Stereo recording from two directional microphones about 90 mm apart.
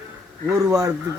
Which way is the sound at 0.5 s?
40° right (ahead or behind).